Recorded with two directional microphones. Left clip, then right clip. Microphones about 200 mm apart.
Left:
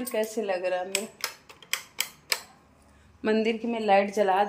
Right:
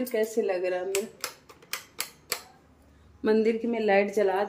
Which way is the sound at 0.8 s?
40° right (ahead or behind).